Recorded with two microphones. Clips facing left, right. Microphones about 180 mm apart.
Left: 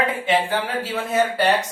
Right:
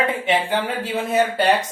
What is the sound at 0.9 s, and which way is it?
Speech, 20° right (ahead or behind).